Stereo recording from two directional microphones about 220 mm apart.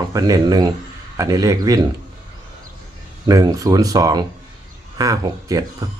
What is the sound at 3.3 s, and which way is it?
Speech, 15° right (ahead or behind).